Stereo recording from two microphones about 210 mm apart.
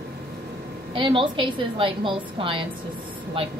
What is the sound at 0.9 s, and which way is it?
A woman's voice, 25° right (ahead or behind).